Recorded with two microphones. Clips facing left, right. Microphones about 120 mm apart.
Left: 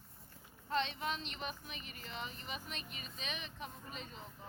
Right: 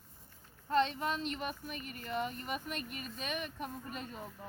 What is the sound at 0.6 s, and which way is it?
Speech, 45° right (ahead or behind).